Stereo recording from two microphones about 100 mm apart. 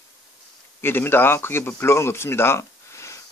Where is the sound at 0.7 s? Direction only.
20° left (ahead or behind).